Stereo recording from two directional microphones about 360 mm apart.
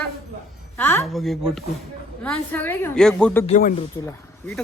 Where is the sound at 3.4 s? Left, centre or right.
Left.